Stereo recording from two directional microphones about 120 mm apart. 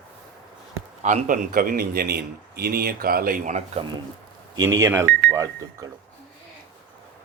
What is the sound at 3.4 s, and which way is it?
Speech, 90° right.